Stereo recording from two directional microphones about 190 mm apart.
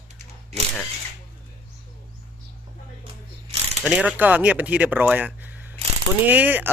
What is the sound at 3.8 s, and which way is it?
Speech, 5° right (ahead or behind).